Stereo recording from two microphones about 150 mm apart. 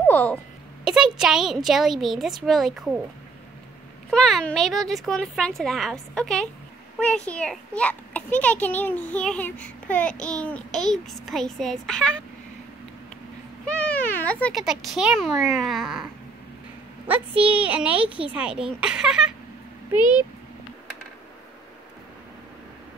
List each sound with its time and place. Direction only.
0.0 s a sound: 10° left (ahead or behind)
0.8 s speech: 5° right (ahead or behind)
4.1 s a child's voice: 5° left (ahead or behind)
13.7 s a sound: 10° left (ahead or behind)
14.6 s speech: 5° right (ahead or behind)
17.1 s a child's voice: 10° right (ahead or behind)
20.0 s speech: 30° left (ahead or behind)